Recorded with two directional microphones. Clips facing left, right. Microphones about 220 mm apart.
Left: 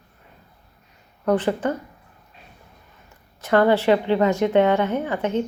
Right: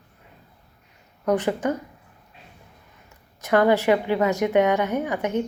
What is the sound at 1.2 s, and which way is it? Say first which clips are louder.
Speech: left 1 dB; 15° right (ahead or behind).